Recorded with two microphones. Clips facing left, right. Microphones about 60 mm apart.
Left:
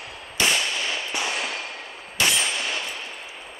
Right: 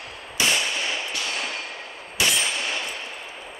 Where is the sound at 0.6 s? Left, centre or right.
Centre.